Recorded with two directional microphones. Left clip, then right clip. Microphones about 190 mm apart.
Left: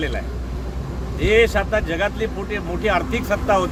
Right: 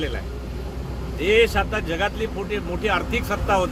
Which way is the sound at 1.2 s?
5° right (ahead or behind).